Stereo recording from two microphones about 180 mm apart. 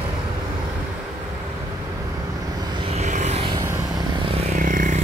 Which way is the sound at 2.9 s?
40° right (ahead or behind).